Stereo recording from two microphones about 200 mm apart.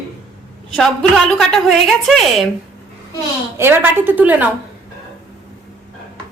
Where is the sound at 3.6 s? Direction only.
10° right (ahead or behind).